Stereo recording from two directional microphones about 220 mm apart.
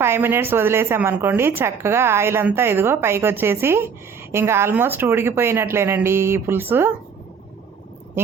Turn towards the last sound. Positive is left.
turn(degrees=-10)  # may be behind; listen again after turning